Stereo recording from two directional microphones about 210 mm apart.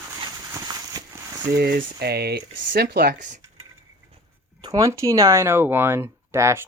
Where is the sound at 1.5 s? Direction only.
45° right (ahead or behind).